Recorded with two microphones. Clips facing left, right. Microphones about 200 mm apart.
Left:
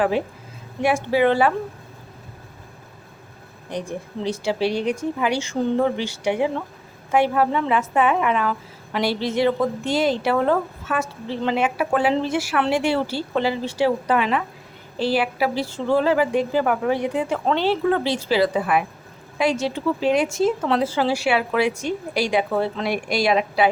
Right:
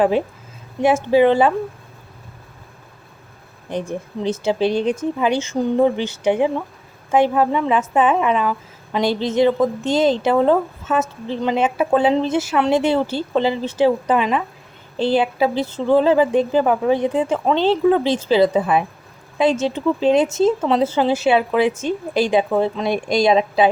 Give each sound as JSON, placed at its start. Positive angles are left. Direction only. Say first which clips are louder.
{"t": 0.8, "sound": "a woman's voice", "louder": "right 5 dB", "side_deg": -20}
{"t": 3.8, "sound": "a woman's voice", "louder": "right 3 dB", "side_deg": -20}